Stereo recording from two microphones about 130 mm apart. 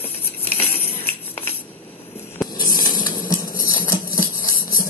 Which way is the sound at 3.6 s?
90° left.